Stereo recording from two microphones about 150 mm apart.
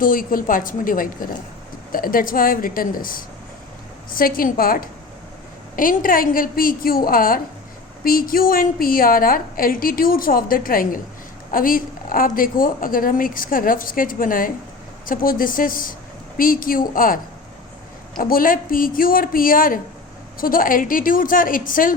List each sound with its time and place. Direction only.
0.0 s a woman's voice: 65° left (ahead or behind)
18.2 s a woman's voice: 70° left (ahead or behind)